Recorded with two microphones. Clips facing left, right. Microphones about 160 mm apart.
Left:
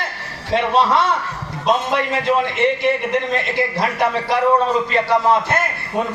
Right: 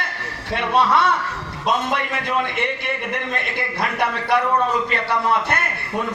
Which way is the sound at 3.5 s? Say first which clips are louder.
Left 2 dB; 60° right (ahead or behind).